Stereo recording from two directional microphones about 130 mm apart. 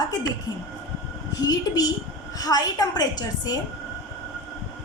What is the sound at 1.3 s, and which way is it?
A woman's voice, 30° left (ahead or behind).